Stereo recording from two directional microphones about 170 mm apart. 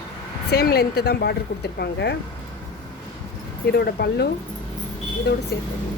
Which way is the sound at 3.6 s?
70° left (ahead or behind).